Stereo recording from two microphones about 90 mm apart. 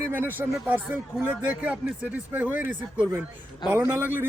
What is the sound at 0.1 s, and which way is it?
A man's voice, 20° right (ahead or behind).